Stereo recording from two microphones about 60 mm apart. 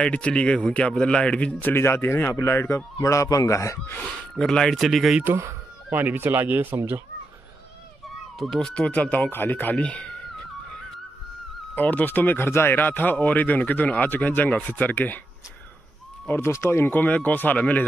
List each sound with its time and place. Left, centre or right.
0.0 s speech: centre
1.7 s speech: left
3.0 s a man's voice: left
4.0 s speech: centre
4.8 s speech: centre
5.9 s speech: right
8.4 s speech: centre
11.7 s speech: left
16.4 s speech: left
16.9 s speech: left